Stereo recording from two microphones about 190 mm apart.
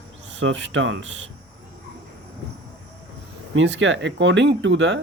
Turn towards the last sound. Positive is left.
turn(degrees=-70)  # may be behind; listen again after turning